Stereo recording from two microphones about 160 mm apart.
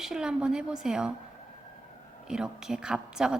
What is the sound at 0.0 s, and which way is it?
A woman's voice, 5° right (ahead or behind).